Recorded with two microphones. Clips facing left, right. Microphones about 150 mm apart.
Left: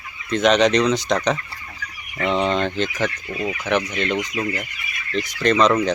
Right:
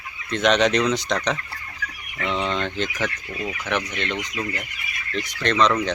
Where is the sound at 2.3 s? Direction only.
15° left (ahead or behind).